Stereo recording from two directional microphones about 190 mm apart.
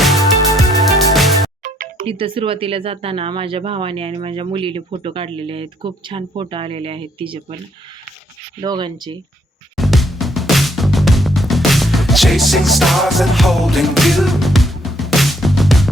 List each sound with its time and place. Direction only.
0.0 s music: centre (ahead or behind)
1.6 s music: 45° right (ahead or behind)
2.0 s speech: 30° right (ahead or behind)
8.6 s speech: 20° right (ahead or behind)
9.7 s music: centre (ahead or behind)